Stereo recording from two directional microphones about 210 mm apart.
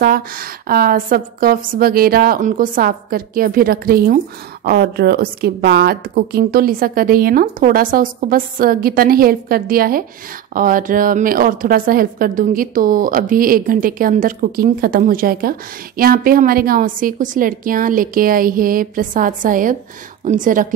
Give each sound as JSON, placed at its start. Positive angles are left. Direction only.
{"t": 0.0, "sound": "a woman's voice", "side_deg": -45}